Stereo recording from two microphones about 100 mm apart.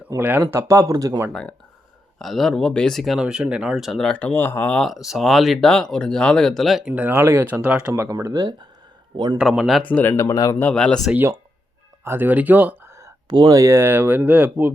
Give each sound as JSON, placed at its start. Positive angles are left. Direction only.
{"t": 0.2, "sound": "speech", "side_deg": -20}
{"t": 0.5, "sound": "speech", "side_deg": -30}
{"t": 1.3, "sound": "speech", "side_deg": 10}
{"t": 3.2, "sound": "speech", "side_deg": -10}
{"t": 4.8, "sound": "speech", "side_deg": 0}
{"t": 6.9, "sound": "speech", "side_deg": -20}
{"t": 7.9, "sound": "a man's voice", "side_deg": -30}
{"t": 9.4, "sound": "speech", "side_deg": 0}
{"t": 9.8, "sound": "speech", "side_deg": 15}
{"t": 10.6, "sound": "speech", "side_deg": 10}
{"t": 12.0, "sound": "speech", "side_deg": -20}
{"t": 13.2, "sound": "speech", "side_deg": -45}